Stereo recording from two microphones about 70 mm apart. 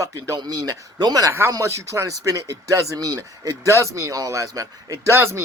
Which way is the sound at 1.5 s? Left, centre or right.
Right.